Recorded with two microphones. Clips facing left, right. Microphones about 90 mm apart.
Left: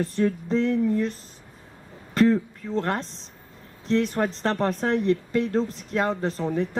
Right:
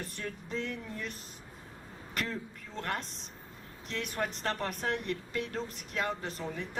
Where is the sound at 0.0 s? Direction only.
35° left (ahead or behind).